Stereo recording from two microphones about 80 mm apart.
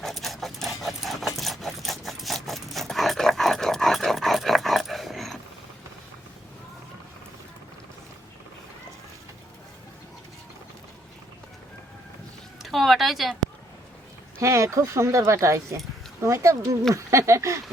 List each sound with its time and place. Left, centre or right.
0.0 s dog: centre
12.6 s a sound: centre
14.3 s speech: right